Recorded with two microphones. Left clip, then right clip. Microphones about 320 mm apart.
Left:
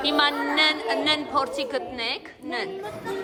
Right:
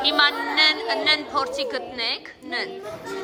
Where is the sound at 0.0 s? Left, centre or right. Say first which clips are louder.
Right 3 dB; centre.